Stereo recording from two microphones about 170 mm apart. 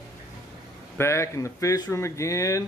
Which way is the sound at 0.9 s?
15° left (ahead or behind).